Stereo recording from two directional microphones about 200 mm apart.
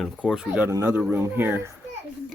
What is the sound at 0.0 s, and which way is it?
Speech, centre (ahead or behind).